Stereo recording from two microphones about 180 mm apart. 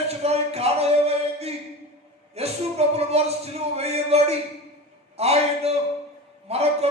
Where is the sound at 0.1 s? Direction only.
35° right (ahead or behind).